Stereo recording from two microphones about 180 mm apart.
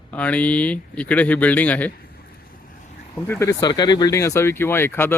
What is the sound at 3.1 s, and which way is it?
Speech, 15° left (ahead or behind).